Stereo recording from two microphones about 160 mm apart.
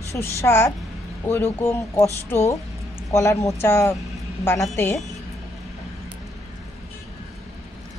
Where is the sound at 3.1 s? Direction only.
20° left (ahead or behind).